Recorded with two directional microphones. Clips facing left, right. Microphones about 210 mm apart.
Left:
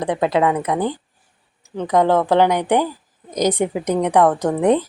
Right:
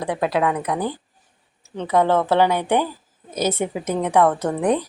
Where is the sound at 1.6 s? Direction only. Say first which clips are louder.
Left 2 dB; 10° left (ahead or behind).